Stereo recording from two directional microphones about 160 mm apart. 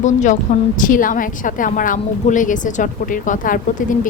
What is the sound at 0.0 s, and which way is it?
A woman's voice, 50° left (ahead or behind).